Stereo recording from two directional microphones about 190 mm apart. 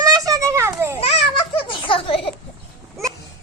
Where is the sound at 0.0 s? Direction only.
20° right (ahead or behind).